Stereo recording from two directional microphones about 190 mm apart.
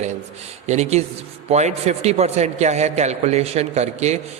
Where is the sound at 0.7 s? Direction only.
35° right (ahead or behind).